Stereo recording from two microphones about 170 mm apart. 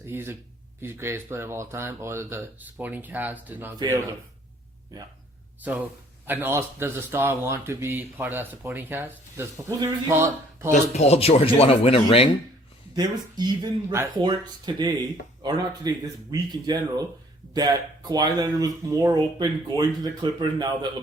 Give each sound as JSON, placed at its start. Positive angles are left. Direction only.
{"t": 0.0, "sound": "speech", "side_deg": -15}
{"t": 3.8, "sound": "speech", "side_deg": -20}
{"t": 6.2, "sound": "speech", "side_deg": -10}
{"t": 10.7, "sound": "speech", "side_deg": 40}
{"t": 12.9, "sound": "speech", "side_deg": -25}